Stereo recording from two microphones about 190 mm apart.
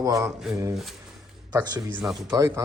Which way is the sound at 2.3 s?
15° right (ahead or behind).